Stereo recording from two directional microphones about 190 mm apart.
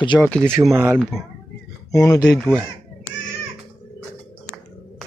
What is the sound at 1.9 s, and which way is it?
Speech, 15° left (ahead or behind).